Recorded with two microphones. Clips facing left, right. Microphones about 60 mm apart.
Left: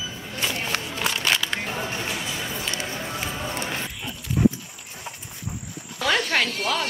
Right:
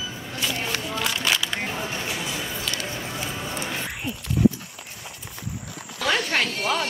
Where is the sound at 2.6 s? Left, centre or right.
Left.